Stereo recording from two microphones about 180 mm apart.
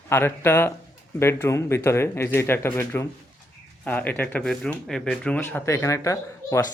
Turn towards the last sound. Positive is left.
turn(degrees=15)  # may be behind; listen again after turning